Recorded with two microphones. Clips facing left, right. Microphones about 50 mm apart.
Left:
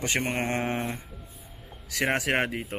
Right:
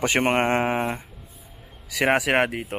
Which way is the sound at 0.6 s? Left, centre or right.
Centre.